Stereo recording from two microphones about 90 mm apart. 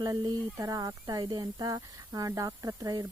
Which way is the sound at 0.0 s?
50° right (ahead or behind).